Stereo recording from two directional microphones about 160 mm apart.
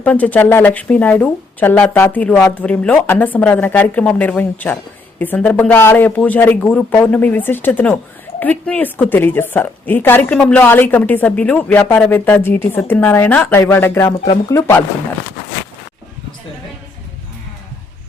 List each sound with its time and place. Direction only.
0.0 s a woman's voice: 10° left (ahead or behind)